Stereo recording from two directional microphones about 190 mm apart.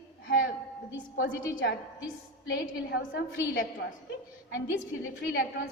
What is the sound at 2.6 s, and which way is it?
A woman's voice, 70° left (ahead or behind).